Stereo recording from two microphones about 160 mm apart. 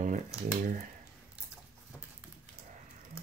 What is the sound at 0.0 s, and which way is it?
Typewriter, 50° right (ahead or behind).